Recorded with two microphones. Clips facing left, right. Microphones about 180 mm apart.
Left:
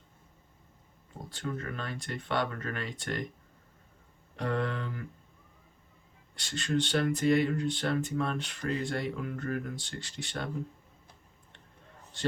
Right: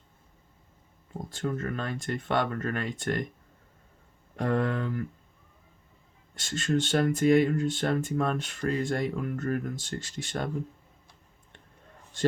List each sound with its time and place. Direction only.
1.3 s speech: 45° right (ahead or behind)
4.4 s speech: 45° right (ahead or behind)
6.3 s speech: 45° right (ahead or behind)